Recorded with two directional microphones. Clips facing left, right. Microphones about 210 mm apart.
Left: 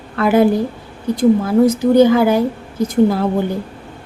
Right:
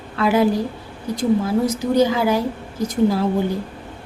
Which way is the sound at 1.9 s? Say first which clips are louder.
Left 5 dB; 55° left (ahead or behind).